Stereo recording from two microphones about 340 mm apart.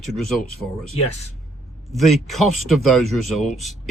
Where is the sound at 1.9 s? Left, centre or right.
Centre.